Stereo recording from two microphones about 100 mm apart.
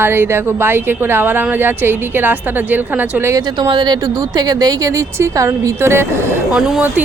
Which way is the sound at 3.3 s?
45° right (ahead or behind).